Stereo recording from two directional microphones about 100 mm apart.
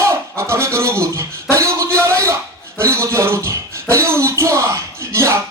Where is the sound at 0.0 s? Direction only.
30° right (ahead or behind).